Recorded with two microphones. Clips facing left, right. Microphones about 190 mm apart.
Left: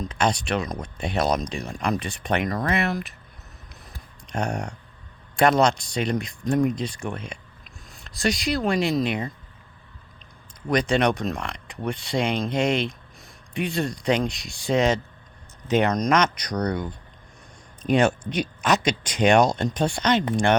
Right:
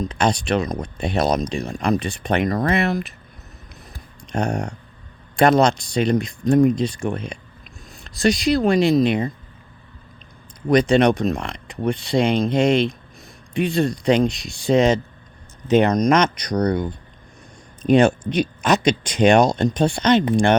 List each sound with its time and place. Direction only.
0.0 s speech: 30° right (ahead or behind)
4.3 s speech: 30° right (ahead or behind)
10.7 s speech: 25° right (ahead or behind)